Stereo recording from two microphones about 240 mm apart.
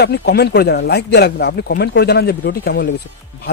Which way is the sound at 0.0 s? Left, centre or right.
Left.